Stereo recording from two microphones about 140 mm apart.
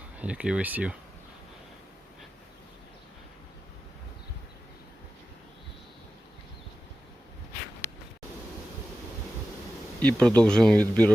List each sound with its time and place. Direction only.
0.2 s speech: 10° right (ahead or behind)
7.8 s a sound: 20° left (ahead or behind)
10.0 s speech: 10° left (ahead or behind)